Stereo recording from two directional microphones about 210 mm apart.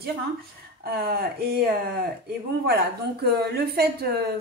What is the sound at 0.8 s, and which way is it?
Speech, 45° right (ahead or behind).